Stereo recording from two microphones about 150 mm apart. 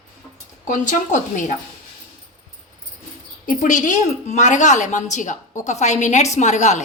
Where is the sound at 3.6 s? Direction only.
60° left (ahead or behind).